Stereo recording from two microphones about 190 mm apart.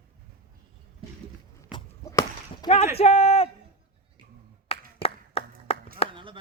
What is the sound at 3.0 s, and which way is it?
Speech, 35° left (ahead or behind).